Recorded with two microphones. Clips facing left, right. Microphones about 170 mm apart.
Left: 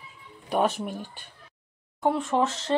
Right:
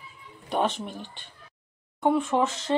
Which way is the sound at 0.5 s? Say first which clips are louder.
Left 2 dB; 10° left (ahead or behind).